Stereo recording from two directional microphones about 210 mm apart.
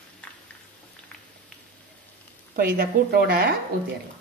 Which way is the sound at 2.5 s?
45° right (ahead or behind).